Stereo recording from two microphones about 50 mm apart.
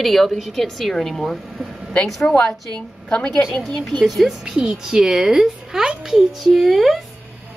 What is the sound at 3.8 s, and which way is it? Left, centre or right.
A woman's voice, centre.